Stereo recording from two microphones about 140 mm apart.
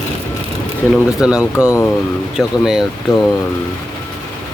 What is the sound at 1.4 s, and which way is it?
Speech, 20° left (ahead or behind).